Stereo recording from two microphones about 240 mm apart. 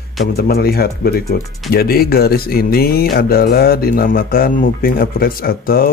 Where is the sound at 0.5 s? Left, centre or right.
Left.